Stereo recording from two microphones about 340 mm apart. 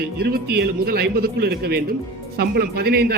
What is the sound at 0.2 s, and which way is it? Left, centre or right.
A man's voice, right.